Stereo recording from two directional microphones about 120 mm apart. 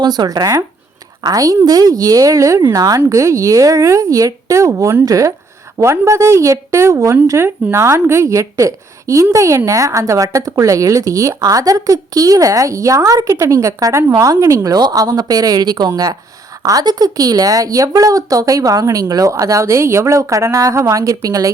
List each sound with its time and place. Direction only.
0.0 s a woman's voice: 35° right (ahead or behind)